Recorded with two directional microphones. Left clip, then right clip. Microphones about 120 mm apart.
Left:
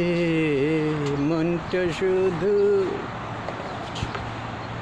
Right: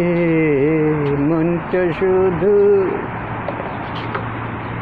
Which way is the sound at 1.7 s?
35° left (ahead or behind).